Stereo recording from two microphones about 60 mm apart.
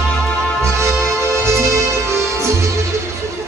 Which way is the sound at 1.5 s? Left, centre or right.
Right.